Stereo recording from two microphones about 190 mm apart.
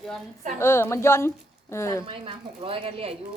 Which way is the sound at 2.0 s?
25° right (ahead or behind).